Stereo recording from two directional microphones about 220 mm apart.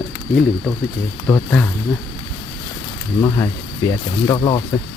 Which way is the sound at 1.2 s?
10° left (ahead or behind).